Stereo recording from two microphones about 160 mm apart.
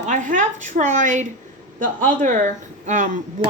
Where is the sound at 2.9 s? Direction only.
50° right (ahead or behind).